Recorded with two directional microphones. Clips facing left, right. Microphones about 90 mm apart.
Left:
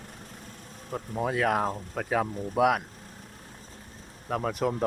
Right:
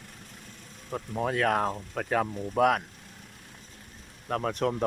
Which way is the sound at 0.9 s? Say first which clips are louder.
Even; centre (ahead or behind).